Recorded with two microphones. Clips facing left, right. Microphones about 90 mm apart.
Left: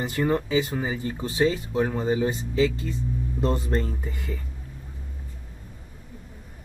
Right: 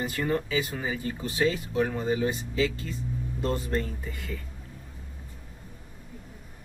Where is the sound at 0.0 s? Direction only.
25° left (ahead or behind).